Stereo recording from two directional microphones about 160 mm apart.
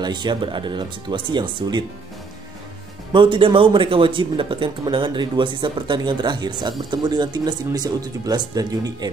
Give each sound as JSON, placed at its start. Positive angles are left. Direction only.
{"t": 0.0, "sound": "speech", "side_deg": -30}
{"t": 3.1, "sound": "speech", "side_deg": -30}